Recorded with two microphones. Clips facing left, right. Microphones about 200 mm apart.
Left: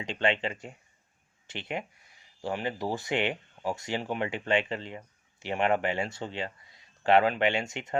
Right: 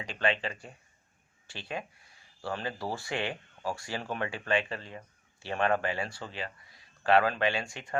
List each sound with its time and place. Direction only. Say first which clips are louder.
0.0 s speech: left 2 dB; 25° left (ahead or behind)